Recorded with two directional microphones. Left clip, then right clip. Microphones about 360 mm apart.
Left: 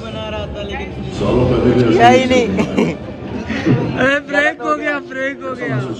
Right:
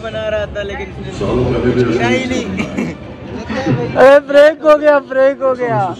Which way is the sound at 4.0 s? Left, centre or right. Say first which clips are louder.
Right 9 dB; right.